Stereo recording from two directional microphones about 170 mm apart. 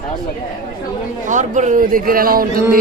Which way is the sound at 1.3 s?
45° right (ahead or behind).